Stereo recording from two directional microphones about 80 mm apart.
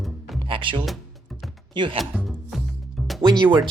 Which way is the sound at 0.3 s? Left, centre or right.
Right.